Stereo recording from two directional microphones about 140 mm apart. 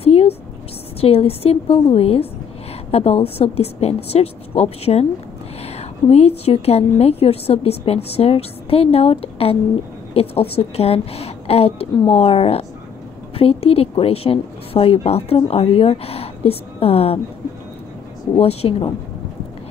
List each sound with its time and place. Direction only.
0.0 s a sound: 45° left (ahead or behind)
1.0 s a woman's voice: 45° left (ahead or behind)
18.3 s a woman's voice: 45° left (ahead or behind)